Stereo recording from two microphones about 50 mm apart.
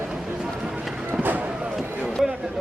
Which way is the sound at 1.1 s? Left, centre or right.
Right.